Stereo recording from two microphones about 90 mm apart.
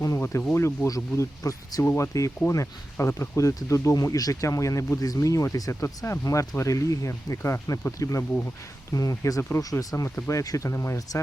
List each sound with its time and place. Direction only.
0.0 s speech: 35° left (ahead or behind)